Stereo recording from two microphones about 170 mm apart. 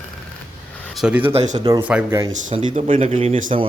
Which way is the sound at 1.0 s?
10° right (ahead or behind).